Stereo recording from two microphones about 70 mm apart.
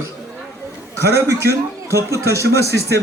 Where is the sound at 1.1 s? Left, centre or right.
Right.